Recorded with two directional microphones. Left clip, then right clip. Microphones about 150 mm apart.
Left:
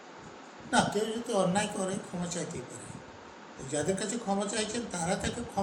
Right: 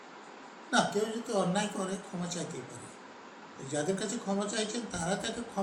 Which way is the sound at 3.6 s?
5° left (ahead or behind).